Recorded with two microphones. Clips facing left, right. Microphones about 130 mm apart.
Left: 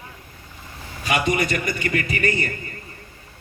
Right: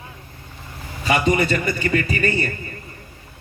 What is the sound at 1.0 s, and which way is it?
A man's voice, 35° right (ahead or behind).